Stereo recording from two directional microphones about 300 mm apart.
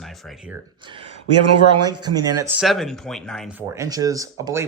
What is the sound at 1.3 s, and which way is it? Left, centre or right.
Speech, right.